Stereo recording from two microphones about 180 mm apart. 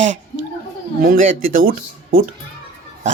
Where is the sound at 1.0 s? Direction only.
55° right (ahead or behind).